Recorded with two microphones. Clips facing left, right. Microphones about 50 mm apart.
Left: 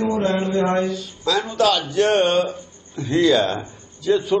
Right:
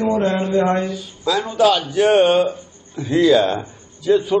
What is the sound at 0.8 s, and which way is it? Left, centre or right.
Speech, centre.